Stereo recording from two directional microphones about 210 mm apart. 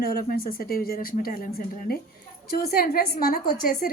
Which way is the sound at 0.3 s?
45° left (ahead or behind).